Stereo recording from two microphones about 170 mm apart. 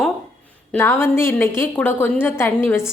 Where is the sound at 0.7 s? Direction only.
15° left (ahead or behind).